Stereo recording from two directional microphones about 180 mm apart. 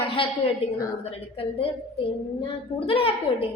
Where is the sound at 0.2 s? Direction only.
30° left (ahead or behind).